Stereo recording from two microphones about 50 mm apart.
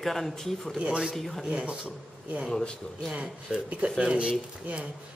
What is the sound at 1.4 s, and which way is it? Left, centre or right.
Speech, right.